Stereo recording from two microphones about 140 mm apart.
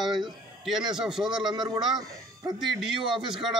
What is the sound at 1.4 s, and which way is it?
Speech, 30° right (ahead or behind).